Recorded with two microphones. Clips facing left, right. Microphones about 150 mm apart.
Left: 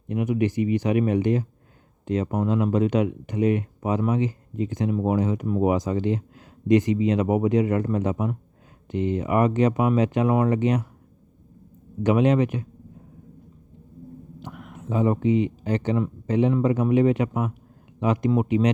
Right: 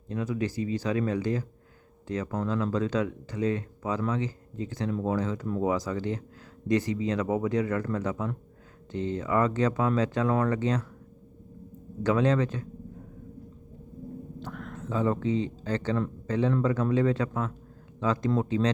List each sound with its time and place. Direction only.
0.1 s speech: 20° left (ahead or behind)
12.0 s speech: 20° left (ahead or behind)
14.4 s speech: 10° left (ahead or behind)